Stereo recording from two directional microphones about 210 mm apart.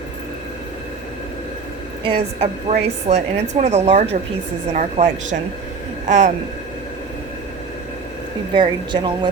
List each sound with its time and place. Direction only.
2.0 s a woman's voice: 30° right (ahead or behind)
8.5 s speech: 20° right (ahead or behind)